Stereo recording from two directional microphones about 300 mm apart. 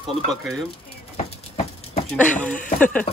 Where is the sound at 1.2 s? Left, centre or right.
Left.